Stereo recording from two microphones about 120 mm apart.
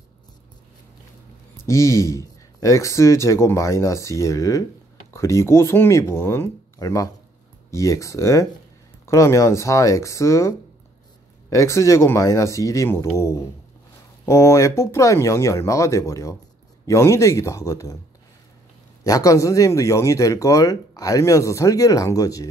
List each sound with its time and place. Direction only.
1.7 s speech: 25° left (ahead or behind)
11.5 s speech: 25° left (ahead or behind)
19.0 s speech: 30° left (ahead or behind)